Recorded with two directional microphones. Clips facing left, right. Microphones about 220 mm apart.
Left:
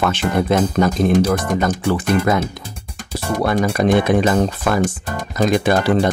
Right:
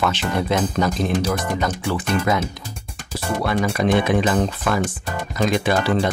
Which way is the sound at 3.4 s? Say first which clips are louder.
Left 4 dB; 45° left (ahead or behind).